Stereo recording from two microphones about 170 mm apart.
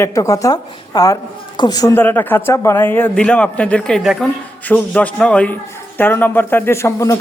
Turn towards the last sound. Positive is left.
turn(degrees=20)  # may be behind; listen again after turning